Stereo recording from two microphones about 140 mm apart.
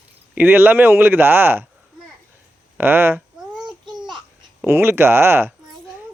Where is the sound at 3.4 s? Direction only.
5° right (ahead or behind).